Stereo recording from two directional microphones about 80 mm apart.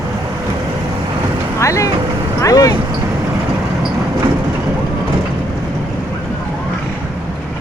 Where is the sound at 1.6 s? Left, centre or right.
Left.